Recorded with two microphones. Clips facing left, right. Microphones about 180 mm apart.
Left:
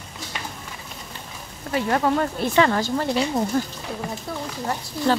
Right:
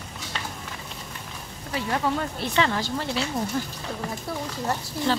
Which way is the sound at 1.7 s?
55° left (ahead or behind).